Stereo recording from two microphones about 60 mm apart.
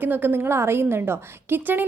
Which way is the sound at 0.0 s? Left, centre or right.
Right.